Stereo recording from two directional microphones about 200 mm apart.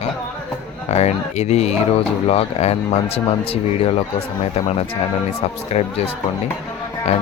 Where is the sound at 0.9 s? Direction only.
35° left (ahead or behind).